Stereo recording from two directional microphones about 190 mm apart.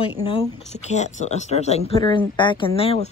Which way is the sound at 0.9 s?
35° left (ahead or behind).